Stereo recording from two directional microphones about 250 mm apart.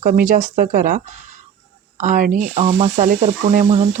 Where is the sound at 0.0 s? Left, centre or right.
Right.